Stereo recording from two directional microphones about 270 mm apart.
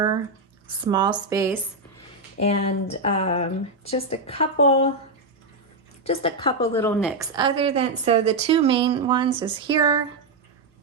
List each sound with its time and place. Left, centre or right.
0.7 s speech: centre
2.4 s speech: left
6.1 s speech: centre
6.7 s a woman's voice: centre
7.2 s a woman's voice: centre